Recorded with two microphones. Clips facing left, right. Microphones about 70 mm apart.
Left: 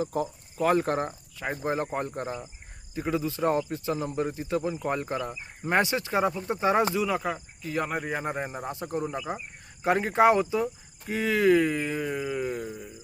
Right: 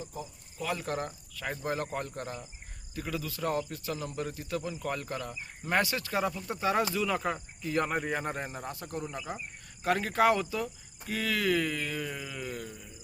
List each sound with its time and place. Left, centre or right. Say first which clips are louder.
0.0 s speech: left 12 dB; left
0.6 s speech: left 9 dB; left
7.0 s speech: left 3 dB; centre; by 12.7 s left